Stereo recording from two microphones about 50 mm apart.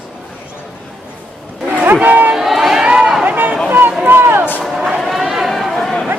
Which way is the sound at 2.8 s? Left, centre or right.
Centre.